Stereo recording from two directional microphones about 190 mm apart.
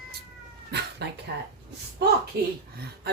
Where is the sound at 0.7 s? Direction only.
60° right (ahead or behind).